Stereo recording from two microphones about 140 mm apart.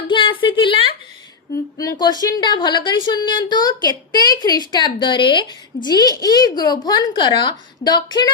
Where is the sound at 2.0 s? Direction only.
30° left (ahead or behind).